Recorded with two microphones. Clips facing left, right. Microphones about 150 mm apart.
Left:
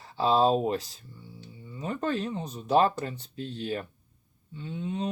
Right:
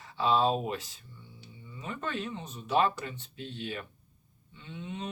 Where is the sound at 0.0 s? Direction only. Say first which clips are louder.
Left 3 dB; 35° left (ahead or behind).